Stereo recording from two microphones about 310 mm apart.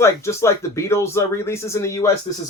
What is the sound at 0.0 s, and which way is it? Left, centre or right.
Speech, centre.